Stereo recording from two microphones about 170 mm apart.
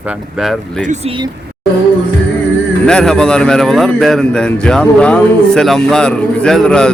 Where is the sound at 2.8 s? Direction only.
5° left (ahead or behind).